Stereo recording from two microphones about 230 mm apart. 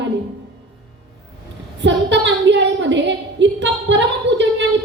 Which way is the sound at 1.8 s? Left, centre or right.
Right.